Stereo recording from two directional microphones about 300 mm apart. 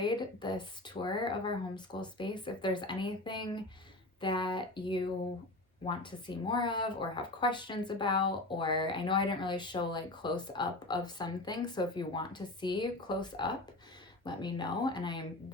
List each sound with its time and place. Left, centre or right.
0.0 s speech: centre